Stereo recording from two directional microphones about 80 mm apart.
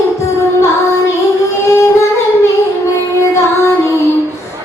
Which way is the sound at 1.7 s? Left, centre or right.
Left.